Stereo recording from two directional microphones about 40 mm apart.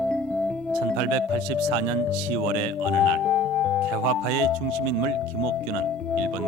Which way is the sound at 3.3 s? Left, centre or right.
Left.